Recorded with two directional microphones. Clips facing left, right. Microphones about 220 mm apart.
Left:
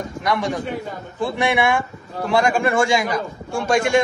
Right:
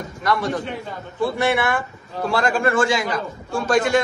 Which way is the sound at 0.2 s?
15° left (ahead or behind).